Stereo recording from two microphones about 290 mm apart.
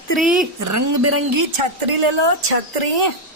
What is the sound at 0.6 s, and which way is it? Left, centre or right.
Speech, right.